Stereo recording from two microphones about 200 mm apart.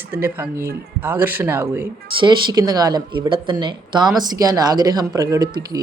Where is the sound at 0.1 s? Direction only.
10° right (ahead or behind).